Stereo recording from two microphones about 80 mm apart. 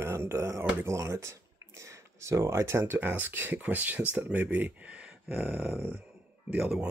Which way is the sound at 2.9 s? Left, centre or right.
Right.